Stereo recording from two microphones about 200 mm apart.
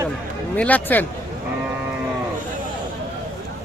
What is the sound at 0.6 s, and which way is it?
Speech, 5° left (ahead or behind).